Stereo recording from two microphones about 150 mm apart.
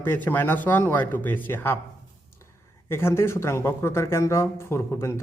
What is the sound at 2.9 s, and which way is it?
A man's voice, 15° left (ahead or behind).